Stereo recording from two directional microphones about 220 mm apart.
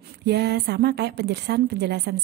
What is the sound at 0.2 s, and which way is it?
A woman's voice, 50° right (ahead or behind).